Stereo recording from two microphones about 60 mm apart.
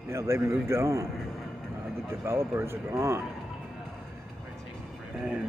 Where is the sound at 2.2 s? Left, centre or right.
Right.